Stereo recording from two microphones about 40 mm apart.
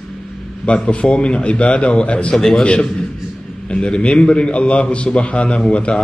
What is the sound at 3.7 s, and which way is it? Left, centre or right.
A man's voice, left.